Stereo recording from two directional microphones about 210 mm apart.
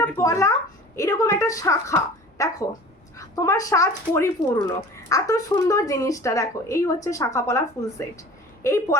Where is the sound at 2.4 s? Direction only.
15° left (ahead or behind).